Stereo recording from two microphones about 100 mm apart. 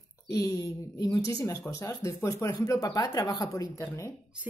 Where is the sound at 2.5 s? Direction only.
45° left (ahead or behind).